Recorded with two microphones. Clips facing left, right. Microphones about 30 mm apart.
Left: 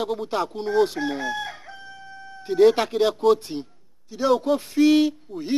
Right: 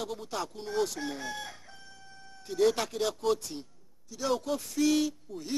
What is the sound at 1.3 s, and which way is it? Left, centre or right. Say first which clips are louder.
Crowing: left 10 dB; centre.